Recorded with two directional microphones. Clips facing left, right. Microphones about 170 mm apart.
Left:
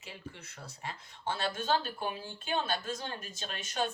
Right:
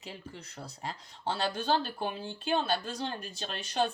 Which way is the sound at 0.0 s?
35° right (ahead or behind).